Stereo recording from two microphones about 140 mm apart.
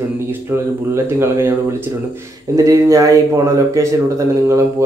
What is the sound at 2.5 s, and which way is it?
Speech, 25° right (ahead or behind).